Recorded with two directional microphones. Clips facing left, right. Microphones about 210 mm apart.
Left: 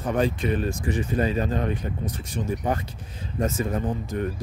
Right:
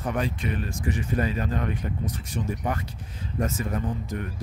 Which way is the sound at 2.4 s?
45° left (ahead or behind).